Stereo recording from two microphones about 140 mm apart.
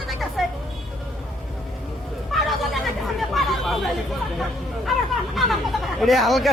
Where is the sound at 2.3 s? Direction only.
Centre (ahead or behind).